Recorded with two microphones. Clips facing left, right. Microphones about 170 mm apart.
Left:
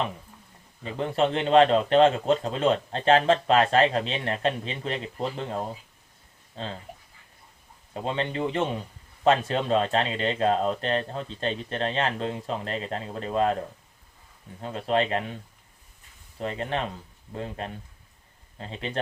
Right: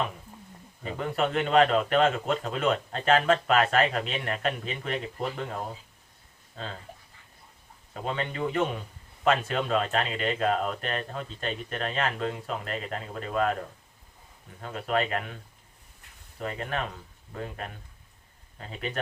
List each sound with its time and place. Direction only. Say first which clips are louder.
0.9 s speech: left 3 dB; 30° left (ahead or behind)
8.0 s speech: left 2 dB; 30° left (ahead or behind)
14.6 s speech: left 3 dB; 30° left (ahead or behind)
16.4 s speech: left 3 dB; 30° left (ahead or behind)